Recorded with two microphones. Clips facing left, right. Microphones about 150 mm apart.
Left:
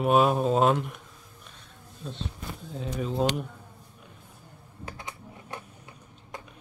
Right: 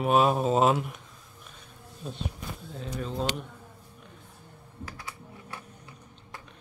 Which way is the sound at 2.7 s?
Centre (ahead or behind).